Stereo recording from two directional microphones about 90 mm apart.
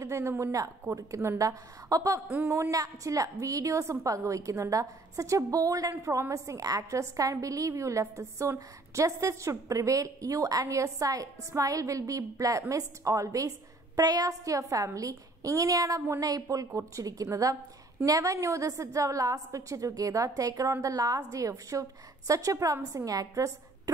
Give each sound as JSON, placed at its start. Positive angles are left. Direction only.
{"t": 0.0, "sound": "a woman's voice", "side_deg": -30}
{"t": 2.2, "sound": "speech", "side_deg": -20}
{"t": 2.5, "sound": "a woman's voice", "side_deg": -35}